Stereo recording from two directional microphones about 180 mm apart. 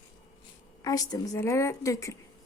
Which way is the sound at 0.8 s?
20° left (ahead or behind).